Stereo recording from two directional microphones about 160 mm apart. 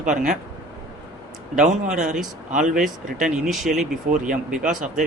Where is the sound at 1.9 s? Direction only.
50° right (ahead or behind).